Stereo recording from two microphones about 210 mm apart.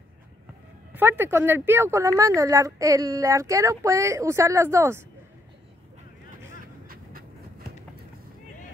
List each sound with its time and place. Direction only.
0.9 s a woman's voice: 10° right (ahead or behind)
6.9 s train: 45° right (ahead or behind)